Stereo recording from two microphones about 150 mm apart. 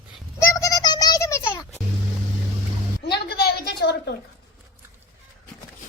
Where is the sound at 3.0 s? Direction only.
90° left.